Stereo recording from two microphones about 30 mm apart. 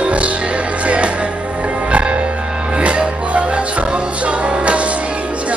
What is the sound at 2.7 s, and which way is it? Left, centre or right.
Music, right.